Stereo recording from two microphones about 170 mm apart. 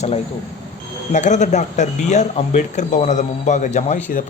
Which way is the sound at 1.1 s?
45° left (ahead or behind).